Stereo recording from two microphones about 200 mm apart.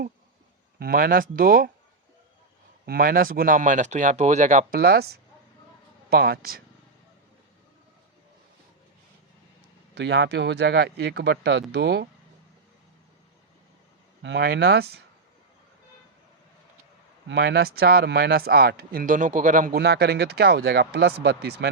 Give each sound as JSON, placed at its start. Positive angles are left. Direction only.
{"t": 0.8, "sound": "speech", "side_deg": -45}
{"t": 2.8, "sound": "speech", "side_deg": -50}
{"t": 9.9, "sound": "speech", "side_deg": -60}
{"t": 14.2, "sound": "speech", "side_deg": -60}
{"t": 17.2, "sound": "speech", "side_deg": -55}